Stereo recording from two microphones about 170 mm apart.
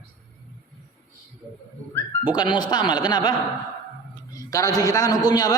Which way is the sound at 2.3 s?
25° left (ahead or behind).